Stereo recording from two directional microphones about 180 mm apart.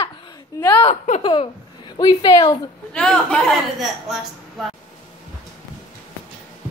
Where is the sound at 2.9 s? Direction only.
5° left (ahead or behind).